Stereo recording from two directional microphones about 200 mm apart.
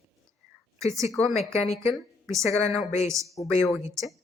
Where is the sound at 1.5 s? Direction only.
35° left (ahead or behind).